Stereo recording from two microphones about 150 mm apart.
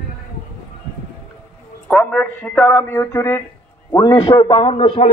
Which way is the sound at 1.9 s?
10° left (ahead or behind).